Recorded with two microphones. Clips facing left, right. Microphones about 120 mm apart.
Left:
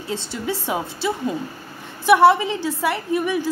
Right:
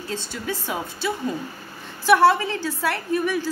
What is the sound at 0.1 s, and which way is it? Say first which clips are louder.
A woman's voice: left 4 dB; 25° left (ahead or behind).